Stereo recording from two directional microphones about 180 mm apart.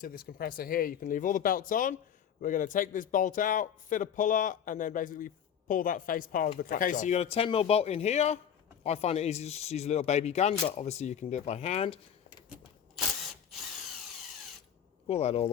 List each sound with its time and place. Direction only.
0.0 s a man's voice: 55° left (ahead or behind); by 11.9 s 35° left (ahead or behind)
15.0 s speech: 35° left (ahead or behind)